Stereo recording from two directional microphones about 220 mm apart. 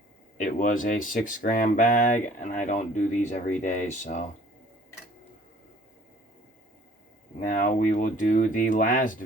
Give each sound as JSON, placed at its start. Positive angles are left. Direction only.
{"t": 0.3, "sound": "speech", "side_deg": 35}
{"t": 7.3, "sound": "speech", "side_deg": 35}